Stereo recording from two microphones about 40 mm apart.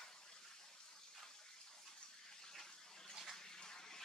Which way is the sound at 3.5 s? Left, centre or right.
Centre.